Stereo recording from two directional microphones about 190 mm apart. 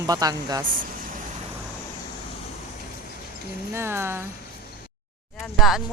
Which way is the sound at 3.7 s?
15° right (ahead or behind).